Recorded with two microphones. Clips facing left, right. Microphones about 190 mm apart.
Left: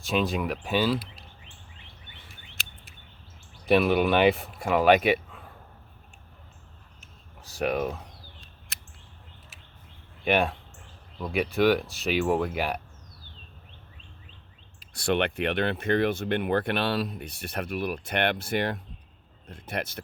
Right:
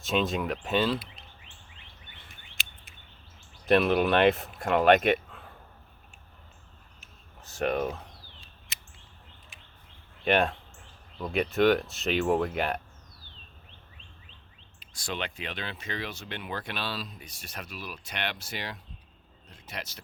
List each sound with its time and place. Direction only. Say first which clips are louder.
0.0 s speech: left 1 dB; centre (ahead or behind)
3.7 s speech: left 1 dB; centre (ahead or behind)
7.4 s speech: left 1 dB; centre (ahead or behind)
9.5 s a sound: left 1 dB; 5° left (ahead or behind)
10.2 s speech: left 1 dB; 5° left (ahead or behind)
14.9 s speech: left 10 dB; 60° left (ahead or behind)